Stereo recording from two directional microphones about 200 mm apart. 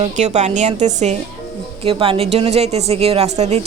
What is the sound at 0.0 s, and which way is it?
Speech, 35° right (ahead or behind).